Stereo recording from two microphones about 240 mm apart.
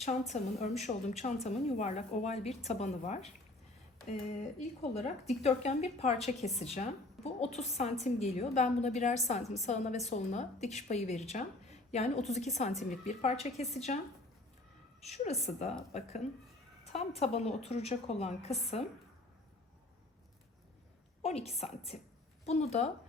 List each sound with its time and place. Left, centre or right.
0.0 s a woman's voice: left
4.8 s a woman's voice: left
15.0 s a woman's voice: left
21.2 s a woman's voice: left